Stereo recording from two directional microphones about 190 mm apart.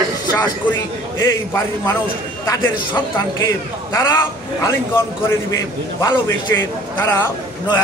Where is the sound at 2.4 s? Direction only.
15° left (ahead or behind).